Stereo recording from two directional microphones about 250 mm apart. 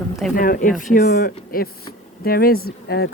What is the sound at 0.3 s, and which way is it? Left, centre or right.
Speech, left.